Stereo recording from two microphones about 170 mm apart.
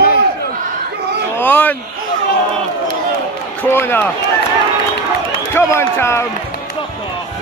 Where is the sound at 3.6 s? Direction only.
15° left (ahead or behind).